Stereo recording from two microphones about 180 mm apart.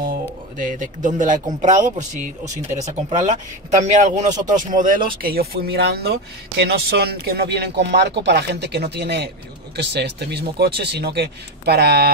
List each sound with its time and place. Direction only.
0.6 s speech: 45° right (ahead or behind); by 12.1 s 65° right (ahead or behind)